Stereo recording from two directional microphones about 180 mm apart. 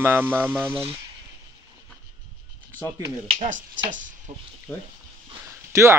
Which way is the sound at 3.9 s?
45° right (ahead or behind).